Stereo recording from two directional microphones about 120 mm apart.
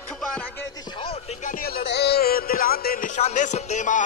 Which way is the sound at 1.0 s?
55° left (ahead or behind).